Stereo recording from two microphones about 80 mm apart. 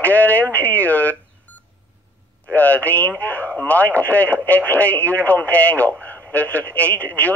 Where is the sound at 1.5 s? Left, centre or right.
Centre.